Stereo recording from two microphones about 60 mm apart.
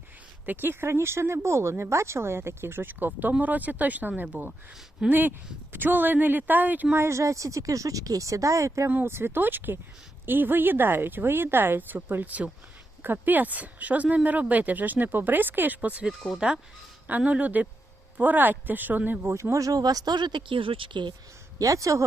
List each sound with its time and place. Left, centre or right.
0.4 s speech: right
6.9 s speech: right
9.0 s speech: right
19.3 s speech: right
21.6 s speech: right